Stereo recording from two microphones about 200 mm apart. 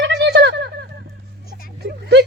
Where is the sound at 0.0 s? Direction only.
60° right (ahead or behind).